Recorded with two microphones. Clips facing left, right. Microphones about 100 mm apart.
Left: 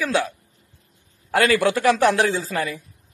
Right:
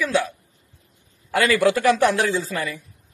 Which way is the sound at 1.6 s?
30° left (ahead or behind).